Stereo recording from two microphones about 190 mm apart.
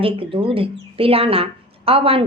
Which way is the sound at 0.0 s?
30° right (ahead or behind).